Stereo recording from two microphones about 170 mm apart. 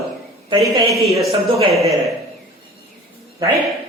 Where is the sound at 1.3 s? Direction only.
35° right (ahead or behind).